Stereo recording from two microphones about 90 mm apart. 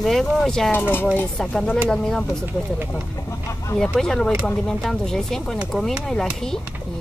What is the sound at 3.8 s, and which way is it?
Speech, 5° left (ahead or behind).